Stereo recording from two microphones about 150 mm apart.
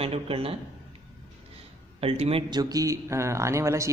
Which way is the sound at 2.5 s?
25° right (ahead or behind).